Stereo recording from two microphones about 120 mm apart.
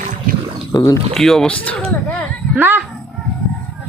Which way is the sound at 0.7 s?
30° left (ahead or behind).